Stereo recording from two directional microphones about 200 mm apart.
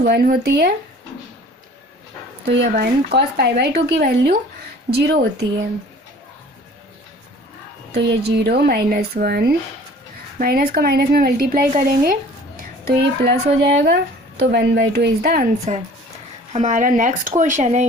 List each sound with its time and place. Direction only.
0.0 s a woman's voice: 50° right (ahead or behind)
2.4 s a woman's voice: 55° right (ahead or behind)
7.9 s a woman's voice: 55° right (ahead or behind)
12.8 s speech: 55° right (ahead or behind)
15.7 s speech: 35° right (ahead or behind)